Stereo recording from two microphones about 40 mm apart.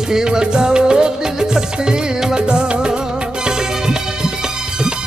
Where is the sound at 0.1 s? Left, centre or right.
Centre.